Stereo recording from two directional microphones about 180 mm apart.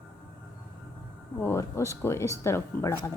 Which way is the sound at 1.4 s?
15° left (ahead or behind).